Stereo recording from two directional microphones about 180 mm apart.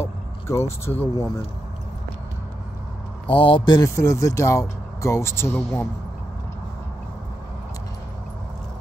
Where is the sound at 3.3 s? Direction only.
30° left (ahead or behind); by 5.9 s 10° left (ahead or behind).